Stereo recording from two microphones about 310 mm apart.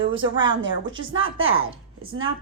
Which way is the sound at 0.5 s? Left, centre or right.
Right.